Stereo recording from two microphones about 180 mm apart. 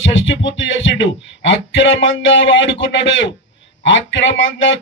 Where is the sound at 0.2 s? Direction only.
90° left.